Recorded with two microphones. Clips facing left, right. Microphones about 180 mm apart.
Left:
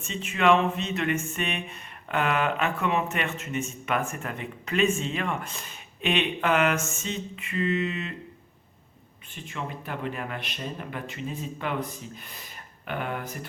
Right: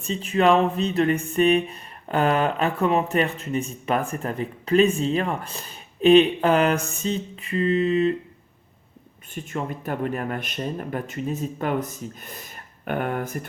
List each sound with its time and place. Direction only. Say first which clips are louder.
0.0 s speech: right 4 dB; 35° right (ahead or behind)
9.3 s speech: right 6 dB; 45° right (ahead or behind)